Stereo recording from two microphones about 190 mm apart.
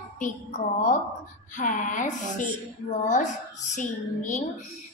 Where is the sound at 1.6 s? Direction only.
45° left (ahead or behind).